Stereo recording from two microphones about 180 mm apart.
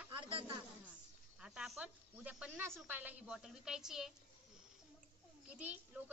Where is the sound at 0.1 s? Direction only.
30° right (ahead or behind).